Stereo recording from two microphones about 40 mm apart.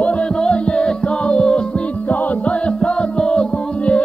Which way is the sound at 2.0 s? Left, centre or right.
Left.